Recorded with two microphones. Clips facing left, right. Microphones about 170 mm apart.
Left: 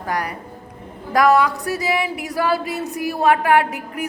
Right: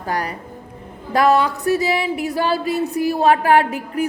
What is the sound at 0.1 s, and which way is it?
A woman's voice, 30° right (ahead or behind).